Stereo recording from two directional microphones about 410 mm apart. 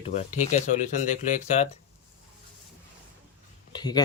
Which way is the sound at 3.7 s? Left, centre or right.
Centre.